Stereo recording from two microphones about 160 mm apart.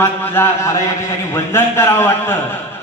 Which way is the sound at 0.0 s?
15° left (ahead or behind).